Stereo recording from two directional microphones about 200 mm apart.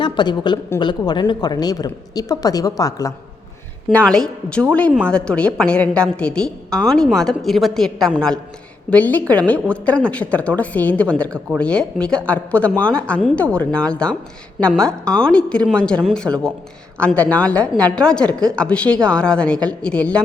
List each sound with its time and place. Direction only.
0.0 s speech: 20° left (ahead or behind)
3.8 s a woman's voice: 5° left (ahead or behind)